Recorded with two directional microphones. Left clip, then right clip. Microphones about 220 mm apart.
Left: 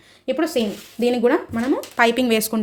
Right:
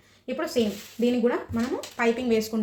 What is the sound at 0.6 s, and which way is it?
Speech, 50° left (ahead or behind).